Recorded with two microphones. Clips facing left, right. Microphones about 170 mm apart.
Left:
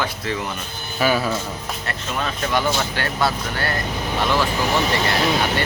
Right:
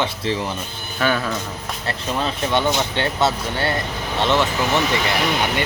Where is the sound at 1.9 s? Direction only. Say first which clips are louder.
Right 4 dB; 30° right (ahead or behind).